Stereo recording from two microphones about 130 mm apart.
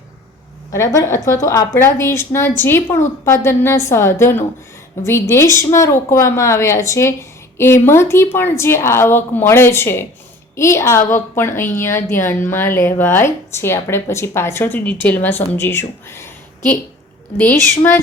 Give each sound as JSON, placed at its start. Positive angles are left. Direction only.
{"t": 0.7, "sound": "a woman's voice", "side_deg": 25}